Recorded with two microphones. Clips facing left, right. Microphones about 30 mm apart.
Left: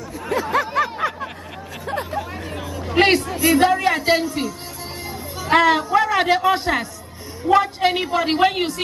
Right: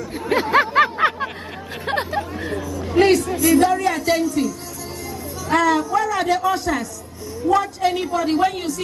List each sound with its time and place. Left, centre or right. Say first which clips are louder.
0.3 s chatter: right 4 dB; right
1.9 s chatter: right 3 dB; right
3.0 s speech: right 1 dB; left